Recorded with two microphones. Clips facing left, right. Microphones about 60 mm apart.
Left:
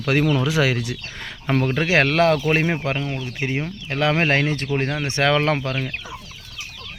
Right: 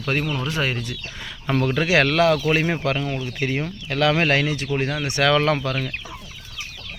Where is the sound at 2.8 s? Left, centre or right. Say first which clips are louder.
Right 1 dB; left.